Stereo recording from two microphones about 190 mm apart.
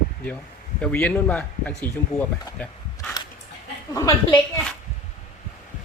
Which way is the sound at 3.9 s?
15° left (ahead or behind).